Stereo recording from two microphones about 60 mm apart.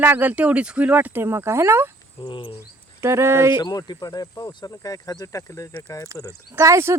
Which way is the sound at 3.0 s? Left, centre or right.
Right.